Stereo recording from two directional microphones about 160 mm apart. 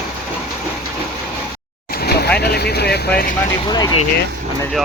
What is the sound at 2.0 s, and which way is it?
Vehicle, 90° left.